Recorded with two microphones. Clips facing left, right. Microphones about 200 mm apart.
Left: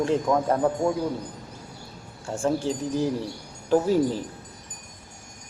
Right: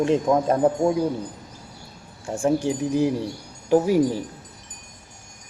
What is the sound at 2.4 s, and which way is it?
Speech, 15° right (ahead or behind).